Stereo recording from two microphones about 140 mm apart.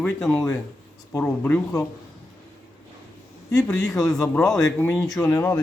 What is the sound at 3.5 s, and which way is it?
Speech, 5° left (ahead or behind).